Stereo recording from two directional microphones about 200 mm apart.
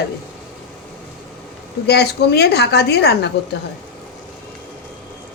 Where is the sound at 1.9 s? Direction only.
55° left (ahead or behind).